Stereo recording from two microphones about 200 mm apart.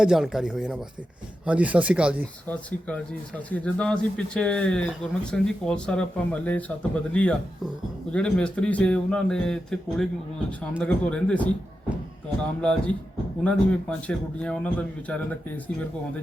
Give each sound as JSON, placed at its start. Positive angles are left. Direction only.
{"t": 0.0, "sound": "speech", "side_deg": 0}
{"t": 2.5, "sound": "a man's voice", "side_deg": 5}
{"t": 13.4, "sound": "a man's voice", "side_deg": 5}